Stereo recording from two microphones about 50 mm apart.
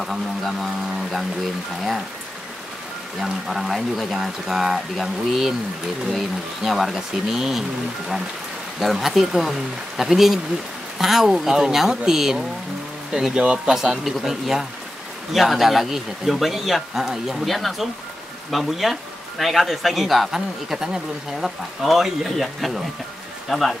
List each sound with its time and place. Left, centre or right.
0.0 s speech: centre
3.2 s speech: centre
8.7 s speech: centre
14.0 s speech: centre